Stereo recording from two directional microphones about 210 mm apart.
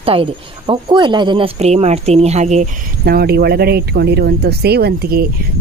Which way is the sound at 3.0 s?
50° right (ahead or behind).